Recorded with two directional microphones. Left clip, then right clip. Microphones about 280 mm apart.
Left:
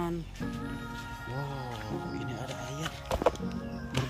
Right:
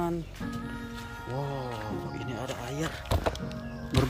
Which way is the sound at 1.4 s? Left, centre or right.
Centre.